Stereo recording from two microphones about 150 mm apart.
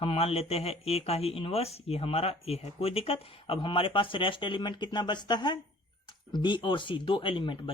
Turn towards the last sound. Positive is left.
turn(degrees=35)  # may be behind; listen again after turning